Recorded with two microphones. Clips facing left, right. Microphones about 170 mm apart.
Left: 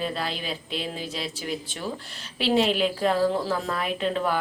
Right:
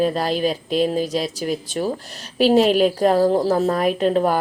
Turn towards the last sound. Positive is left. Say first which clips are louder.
# right 8 dB
turn(degrees=-45)  # may be behind; listen again after turning